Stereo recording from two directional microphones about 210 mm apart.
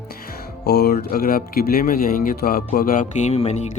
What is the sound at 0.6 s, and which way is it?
Speech, 50° left (ahead or behind).